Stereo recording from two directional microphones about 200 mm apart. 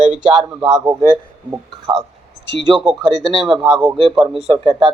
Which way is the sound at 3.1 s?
20° right (ahead or behind).